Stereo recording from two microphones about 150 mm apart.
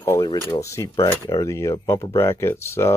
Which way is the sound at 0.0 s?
20° left (ahead or behind).